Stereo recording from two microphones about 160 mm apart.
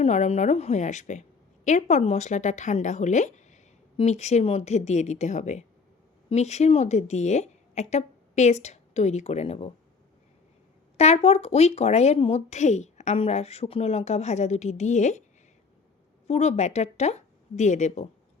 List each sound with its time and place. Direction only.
0.0 s a woman's voice: 45° left (ahead or behind)
10.9 s speech: 40° left (ahead or behind)
16.2 s speech: 40° left (ahead or behind)